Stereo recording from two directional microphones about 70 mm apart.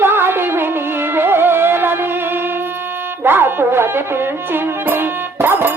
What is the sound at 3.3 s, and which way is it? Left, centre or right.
Music, right.